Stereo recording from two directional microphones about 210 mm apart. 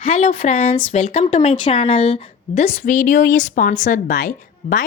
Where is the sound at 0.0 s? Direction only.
40° left (ahead or behind).